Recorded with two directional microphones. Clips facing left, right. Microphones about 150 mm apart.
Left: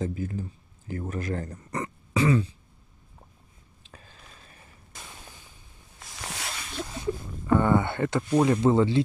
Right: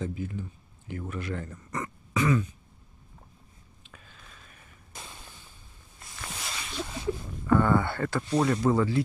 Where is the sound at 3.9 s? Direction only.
35° left (ahead or behind).